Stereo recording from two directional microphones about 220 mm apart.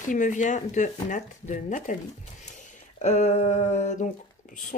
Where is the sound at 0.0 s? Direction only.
35° left (ahead or behind).